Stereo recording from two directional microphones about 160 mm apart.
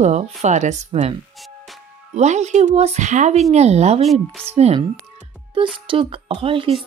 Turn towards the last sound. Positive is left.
turn(degrees=-35)  # may be behind; listen again after turning